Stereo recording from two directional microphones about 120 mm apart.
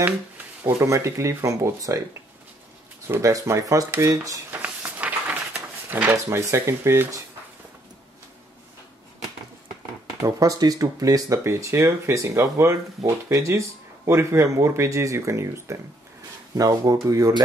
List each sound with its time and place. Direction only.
0.7 s speech: 25° right (ahead or behind)
3.1 s speech: 25° right (ahead or behind)
4.6 s a sound: 15° right (ahead or behind)
6.1 s speech: 20° right (ahead or behind)
10.2 s speech: 30° right (ahead or behind)